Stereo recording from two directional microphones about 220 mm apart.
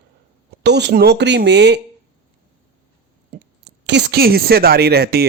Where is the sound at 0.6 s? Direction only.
50° right (ahead or behind).